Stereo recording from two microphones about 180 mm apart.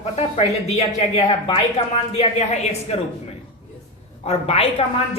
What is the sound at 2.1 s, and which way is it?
Speech, 35° left (ahead or behind).